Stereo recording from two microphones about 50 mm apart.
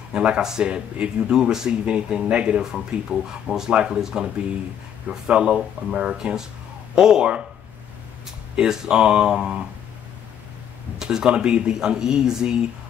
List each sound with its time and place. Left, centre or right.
0.1 s speech: centre
8.5 s speech: centre
11.0 s speech: centre